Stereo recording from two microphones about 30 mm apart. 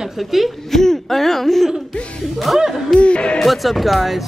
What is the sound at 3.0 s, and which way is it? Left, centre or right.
Speech, left.